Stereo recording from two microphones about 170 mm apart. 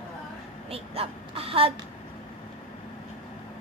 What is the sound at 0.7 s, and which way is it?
A woman's voice, 35° right (ahead or behind).